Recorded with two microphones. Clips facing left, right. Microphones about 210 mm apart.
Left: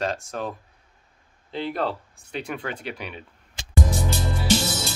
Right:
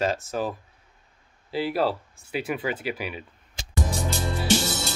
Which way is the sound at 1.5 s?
5° right (ahead or behind).